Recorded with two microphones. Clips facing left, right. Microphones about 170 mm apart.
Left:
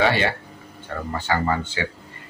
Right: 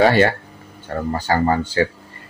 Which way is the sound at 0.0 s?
45° right (ahead or behind).